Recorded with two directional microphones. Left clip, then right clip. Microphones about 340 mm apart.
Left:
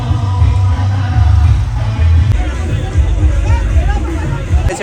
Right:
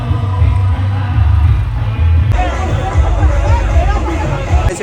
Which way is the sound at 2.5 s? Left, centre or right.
Right.